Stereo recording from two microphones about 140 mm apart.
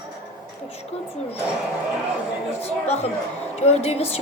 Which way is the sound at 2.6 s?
50° left (ahead or behind).